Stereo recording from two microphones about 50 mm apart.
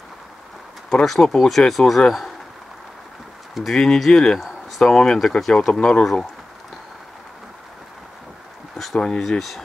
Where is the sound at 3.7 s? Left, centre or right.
Centre.